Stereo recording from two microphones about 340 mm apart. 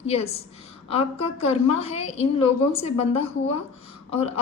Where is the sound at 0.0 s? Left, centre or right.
Centre.